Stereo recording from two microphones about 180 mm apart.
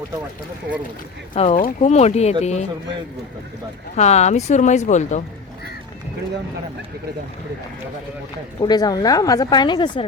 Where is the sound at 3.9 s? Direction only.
40° left (ahead or behind).